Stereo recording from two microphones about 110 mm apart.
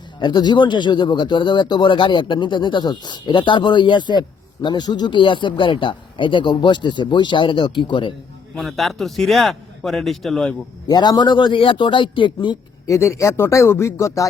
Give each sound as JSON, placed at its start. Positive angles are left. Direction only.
{"t": 0.2, "sound": "speech", "side_deg": 40}
{"t": 8.5, "sound": "a man's voice", "side_deg": 0}
{"t": 10.8, "sound": "speech", "side_deg": 40}
{"t": 12.8, "sound": "speech", "side_deg": 25}